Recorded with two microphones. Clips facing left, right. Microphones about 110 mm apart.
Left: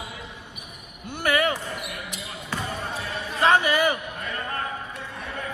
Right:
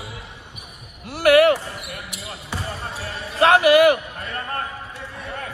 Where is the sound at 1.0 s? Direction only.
80° right.